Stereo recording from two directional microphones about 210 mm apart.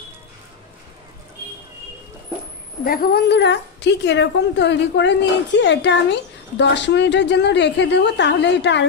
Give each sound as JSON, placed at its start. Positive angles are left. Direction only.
{"t": 2.8, "sound": "a woman's voice", "side_deg": 45}